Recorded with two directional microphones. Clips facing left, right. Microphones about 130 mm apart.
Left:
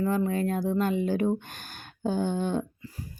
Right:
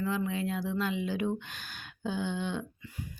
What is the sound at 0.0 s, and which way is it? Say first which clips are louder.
Speech: left 5 dB; 45° left (ahead or behind).